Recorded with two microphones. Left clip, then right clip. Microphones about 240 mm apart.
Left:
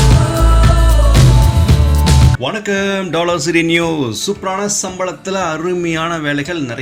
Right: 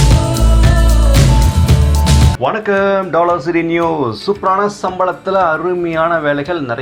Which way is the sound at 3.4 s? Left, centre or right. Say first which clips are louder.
Left 1 dB; left.